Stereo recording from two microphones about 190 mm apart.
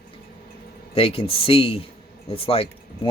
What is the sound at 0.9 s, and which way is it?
Speech, 30° left (ahead or behind).